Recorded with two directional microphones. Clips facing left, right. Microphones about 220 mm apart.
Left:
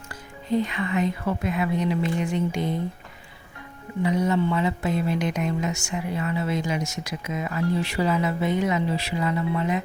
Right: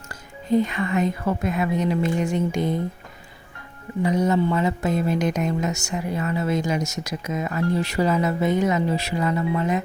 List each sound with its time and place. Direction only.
0.5 s speech: 45° right (ahead or behind)
4.0 s speech: 40° right (ahead or behind)